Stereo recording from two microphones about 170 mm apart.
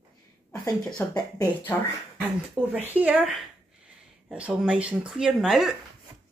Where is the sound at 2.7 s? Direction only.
10° right (ahead or behind).